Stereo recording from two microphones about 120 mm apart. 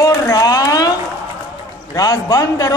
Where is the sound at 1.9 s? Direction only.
30° left (ahead or behind).